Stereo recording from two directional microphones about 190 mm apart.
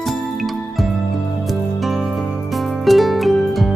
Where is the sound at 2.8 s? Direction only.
Centre (ahead or behind).